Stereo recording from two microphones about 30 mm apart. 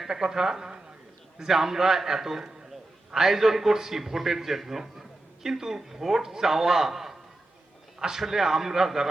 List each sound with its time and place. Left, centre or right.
0.1 s a man's voice: centre
1.5 s a man's voice: centre